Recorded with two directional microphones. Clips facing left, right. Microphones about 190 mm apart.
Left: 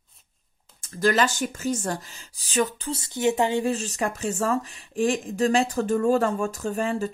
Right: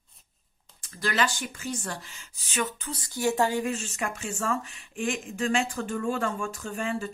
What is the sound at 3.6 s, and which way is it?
Speech, 35° left (ahead or behind).